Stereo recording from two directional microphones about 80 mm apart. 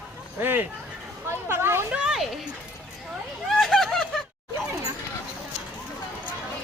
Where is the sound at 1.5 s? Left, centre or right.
Right.